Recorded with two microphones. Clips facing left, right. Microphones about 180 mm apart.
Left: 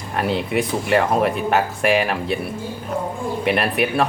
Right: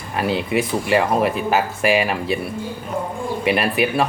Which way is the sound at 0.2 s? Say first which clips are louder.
Right 1 dB; centre (ahead or behind).